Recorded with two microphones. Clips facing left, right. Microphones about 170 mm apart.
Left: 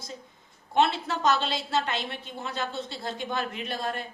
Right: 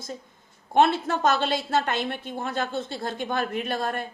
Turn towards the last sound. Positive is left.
turn(degrees=-50)  # may be behind; listen again after turning